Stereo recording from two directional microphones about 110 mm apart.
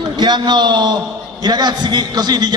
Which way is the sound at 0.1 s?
40° right (ahead or behind).